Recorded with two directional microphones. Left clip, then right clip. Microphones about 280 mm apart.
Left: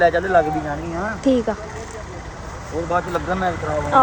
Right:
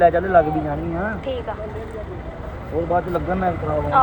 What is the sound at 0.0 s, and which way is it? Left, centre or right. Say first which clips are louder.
Speech: right 1 dB; left.